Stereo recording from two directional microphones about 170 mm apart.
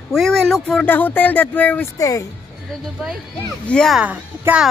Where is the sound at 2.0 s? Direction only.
20° left (ahead or behind).